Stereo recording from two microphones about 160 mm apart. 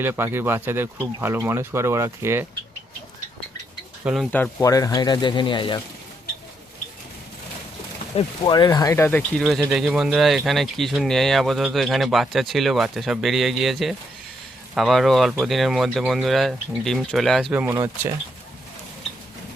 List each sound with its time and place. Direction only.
0.0 s speech: 15° right (ahead or behind)
4.0 s speech: centre (ahead or behind)
4.6 s speech: 20° left (ahead or behind)
8.1 s speech: 30° left (ahead or behind); by 9.4 s 10° left (ahead or behind)
9.4 s speech: centre (ahead or behind)
17.5 s speech: 10° right (ahead or behind)